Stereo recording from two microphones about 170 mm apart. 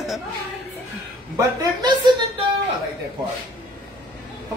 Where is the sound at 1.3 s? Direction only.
20° right (ahead or behind).